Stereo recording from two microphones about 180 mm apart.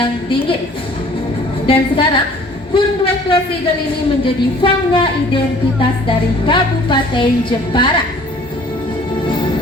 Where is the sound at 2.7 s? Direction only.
30° left (ahead or behind).